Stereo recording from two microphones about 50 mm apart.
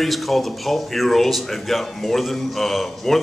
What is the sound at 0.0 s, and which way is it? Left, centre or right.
Speech, centre.